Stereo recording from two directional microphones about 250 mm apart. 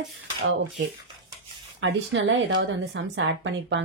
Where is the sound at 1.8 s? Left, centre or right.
Right.